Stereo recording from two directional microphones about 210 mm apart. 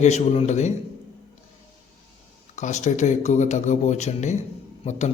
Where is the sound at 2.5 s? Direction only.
35° left (ahead or behind).